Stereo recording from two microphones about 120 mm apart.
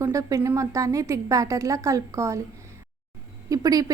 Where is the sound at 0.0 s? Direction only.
25° right (ahead or behind).